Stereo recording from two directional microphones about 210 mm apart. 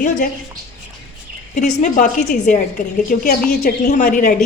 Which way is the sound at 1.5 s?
35° left (ahead or behind).